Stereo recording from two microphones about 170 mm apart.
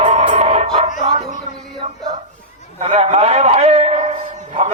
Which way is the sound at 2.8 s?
40° right (ahead or behind).